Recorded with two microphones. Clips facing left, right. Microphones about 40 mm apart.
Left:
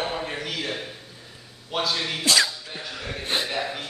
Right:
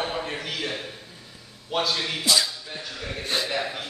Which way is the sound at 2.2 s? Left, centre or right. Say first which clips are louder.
Left 3 dB; left.